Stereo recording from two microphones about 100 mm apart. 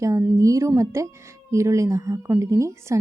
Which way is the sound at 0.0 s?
30° right (ahead or behind).